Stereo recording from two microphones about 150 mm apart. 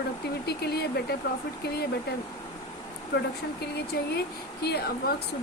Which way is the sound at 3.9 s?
90° left.